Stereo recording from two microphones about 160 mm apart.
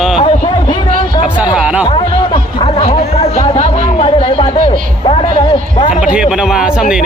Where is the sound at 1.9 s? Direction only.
35° left (ahead or behind).